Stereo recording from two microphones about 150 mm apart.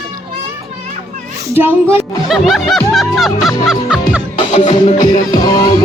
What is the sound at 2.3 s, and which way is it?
Speech, centre (ahead or behind).